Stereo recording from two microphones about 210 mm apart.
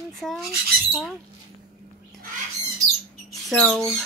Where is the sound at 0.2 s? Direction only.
Centre (ahead or behind).